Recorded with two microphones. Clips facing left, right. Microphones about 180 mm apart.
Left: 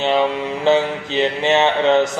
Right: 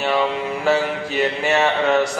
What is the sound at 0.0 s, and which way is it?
Mantra, 25° left (ahead or behind).